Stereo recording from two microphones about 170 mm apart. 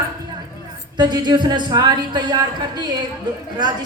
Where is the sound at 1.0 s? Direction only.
25° right (ahead or behind).